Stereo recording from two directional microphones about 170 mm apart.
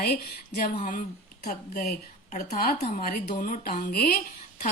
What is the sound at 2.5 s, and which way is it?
A woman's voice, 60° left (ahead or behind).